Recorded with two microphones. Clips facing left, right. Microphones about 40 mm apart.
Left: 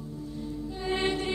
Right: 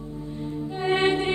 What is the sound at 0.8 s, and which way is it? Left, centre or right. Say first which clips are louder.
Music: right 7 dB; right.